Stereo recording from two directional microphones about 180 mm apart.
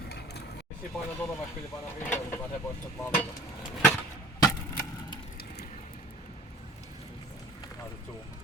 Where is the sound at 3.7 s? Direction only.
5° left (ahead or behind).